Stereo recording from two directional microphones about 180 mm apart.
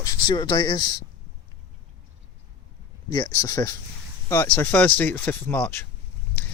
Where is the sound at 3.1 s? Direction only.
20° left (ahead or behind).